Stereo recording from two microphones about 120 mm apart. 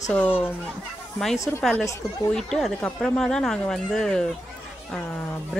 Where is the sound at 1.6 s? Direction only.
Centre (ahead or behind).